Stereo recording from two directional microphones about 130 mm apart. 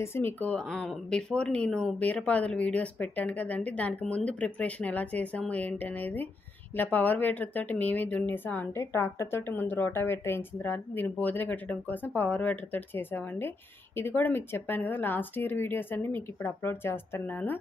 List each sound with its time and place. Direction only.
0.0 s speech: 20° left (ahead or behind)